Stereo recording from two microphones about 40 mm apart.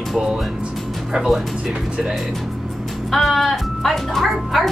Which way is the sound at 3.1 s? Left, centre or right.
Centre.